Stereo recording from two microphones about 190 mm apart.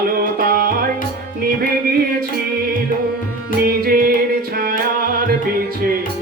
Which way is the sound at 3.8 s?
50° right (ahead or behind).